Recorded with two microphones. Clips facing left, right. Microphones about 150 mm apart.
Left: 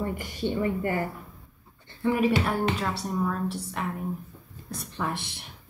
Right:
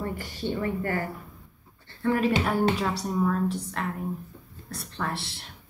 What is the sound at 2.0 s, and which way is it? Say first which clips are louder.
Speech: even; 10° left (ahead or behind).